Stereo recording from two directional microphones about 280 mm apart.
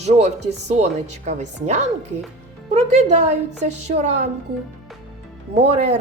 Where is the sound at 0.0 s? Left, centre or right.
Right.